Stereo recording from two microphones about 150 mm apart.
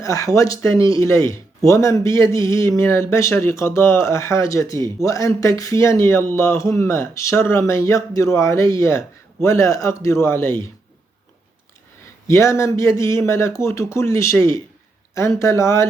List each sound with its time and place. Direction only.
0.0 s speech: 20° left (ahead or behind)
12.3 s speech: 20° left (ahead or behind)